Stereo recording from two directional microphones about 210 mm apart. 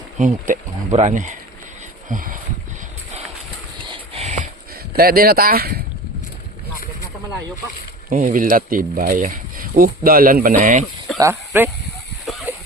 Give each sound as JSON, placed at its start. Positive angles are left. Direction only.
{"t": 0.2, "sound": "speech", "side_deg": -35}
{"t": 3.8, "sound": "a sound", "side_deg": -25}
{"t": 4.9, "sound": "speech", "side_deg": -45}
{"t": 8.1, "sound": "speech", "side_deg": -40}
{"t": 11.2, "sound": "speech", "side_deg": -10}
{"t": 12.2, "sound": "a sound", "side_deg": 0}